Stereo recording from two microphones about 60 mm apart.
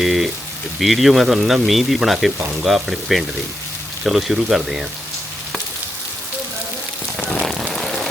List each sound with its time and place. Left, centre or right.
0.0 s boiling: centre
0.8 s speech: centre
7.2 s rain on surface: centre
7.4 s rain on surface: centre